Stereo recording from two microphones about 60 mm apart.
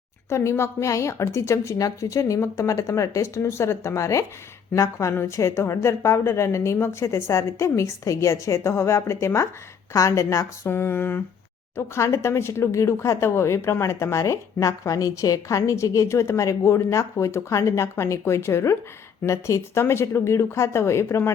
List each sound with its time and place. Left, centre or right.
0.3 s a woman's voice: left
11.8 s a woman's voice: left